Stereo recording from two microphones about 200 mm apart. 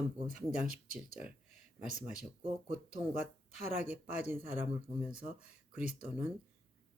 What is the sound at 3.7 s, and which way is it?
Speech, 10° right (ahead or behind).